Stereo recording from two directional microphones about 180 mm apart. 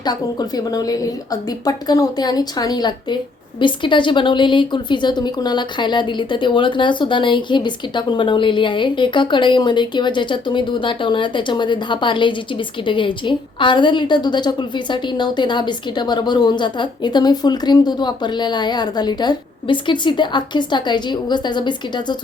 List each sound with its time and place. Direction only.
0.0 s a woman's voice: 20° left (ahead or behind)